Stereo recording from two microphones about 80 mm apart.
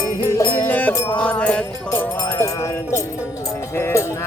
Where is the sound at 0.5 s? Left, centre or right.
Left.